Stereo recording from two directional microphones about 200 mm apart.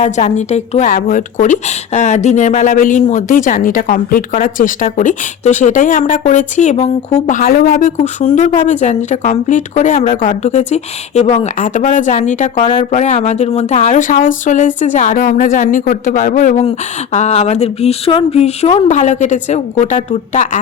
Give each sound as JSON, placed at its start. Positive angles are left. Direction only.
{"t": 0.0, "sound": "a woman's voice", "side_deg": 35}